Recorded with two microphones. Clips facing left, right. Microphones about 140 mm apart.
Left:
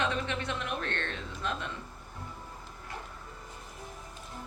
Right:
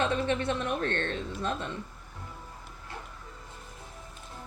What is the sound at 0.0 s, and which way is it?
A woman's voice, 25° right (ahead or behind).